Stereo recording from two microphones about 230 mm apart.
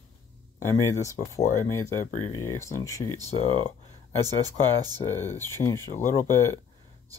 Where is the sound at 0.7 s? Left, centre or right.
Centre.